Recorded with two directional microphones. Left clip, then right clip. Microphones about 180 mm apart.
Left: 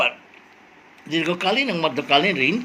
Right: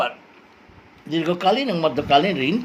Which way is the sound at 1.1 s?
25° right (ahead or behind).